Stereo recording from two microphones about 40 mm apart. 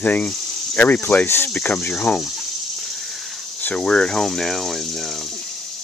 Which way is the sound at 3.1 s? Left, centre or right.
Centre.